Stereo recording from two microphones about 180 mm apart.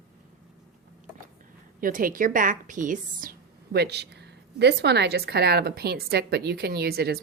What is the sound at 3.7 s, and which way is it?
A woman's voice, 65° right (ahead or behind).